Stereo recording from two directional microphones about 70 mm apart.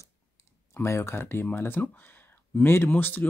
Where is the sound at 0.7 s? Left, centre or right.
Left.